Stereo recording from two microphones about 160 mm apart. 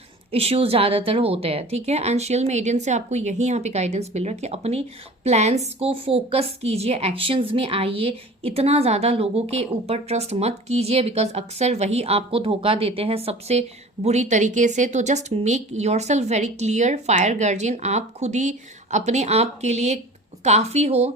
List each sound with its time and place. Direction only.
0.3 s a woman's voice: 40° right (ahead or behind)